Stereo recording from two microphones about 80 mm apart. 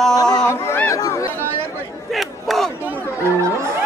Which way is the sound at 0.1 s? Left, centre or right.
Left.